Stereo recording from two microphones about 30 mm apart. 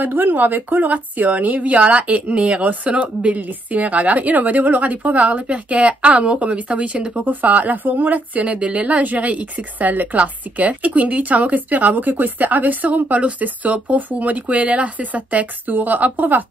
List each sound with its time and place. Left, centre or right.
0.0 s speech: right
1.8 s speech: right
3.3 s a woman's voice: right
7.2 s speech: right
8.5 s speech: right
10.1 s a woman's voice: right